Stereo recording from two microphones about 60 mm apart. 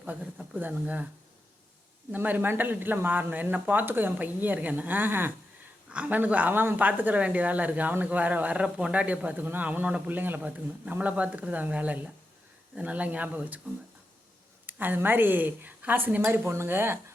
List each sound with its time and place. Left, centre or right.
0.6 s a man's voice: right
2.1 s speech: right
5.9 s a man's voice: right
14.7 s speech: right